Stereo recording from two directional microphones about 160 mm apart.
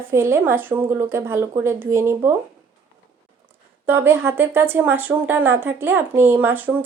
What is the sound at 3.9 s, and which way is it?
Speech, 15° right (ahead or behind).